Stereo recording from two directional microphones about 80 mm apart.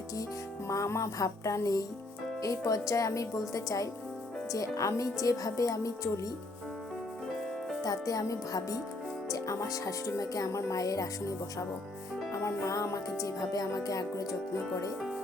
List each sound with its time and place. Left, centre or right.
0.7 s music: left
2.4 s speech: left
7.9 s speech: left
12.3 s music: left